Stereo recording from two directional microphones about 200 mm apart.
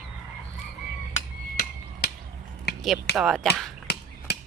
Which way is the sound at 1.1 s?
45° left (ahead or behind).